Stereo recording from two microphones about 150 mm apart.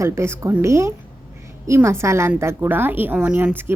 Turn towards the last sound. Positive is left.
turn(degrees=-15)  # may be behind; listen again after turning